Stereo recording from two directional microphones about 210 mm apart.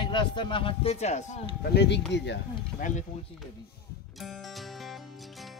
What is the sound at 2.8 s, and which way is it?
Speech, 40° left (ahead or behind).